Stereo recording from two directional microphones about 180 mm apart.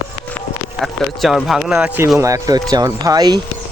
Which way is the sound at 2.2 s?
20° right (ahead or behind).